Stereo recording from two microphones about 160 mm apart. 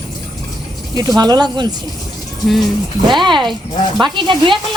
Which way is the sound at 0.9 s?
25° right (ahead or behind).